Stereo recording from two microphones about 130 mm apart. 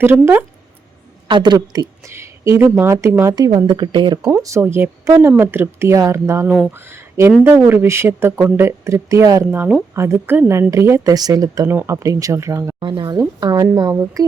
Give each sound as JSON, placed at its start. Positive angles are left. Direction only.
{"t": 0.0, "sound": "speech", "side_deg": -15}
{"t": 1.3, "sound": "a woman's voice", "side_deg": -35}
{"t": 3.3, "sound": "a woman's voice", "side_deg": -30}
{"t": 4.3, "sound": "speech", "side_deg": -20}
{"t": 12.8, "sound": "a woman's voice", "side_deg": -35}